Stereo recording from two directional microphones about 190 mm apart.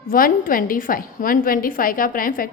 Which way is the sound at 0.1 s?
50° left (ahead or behind).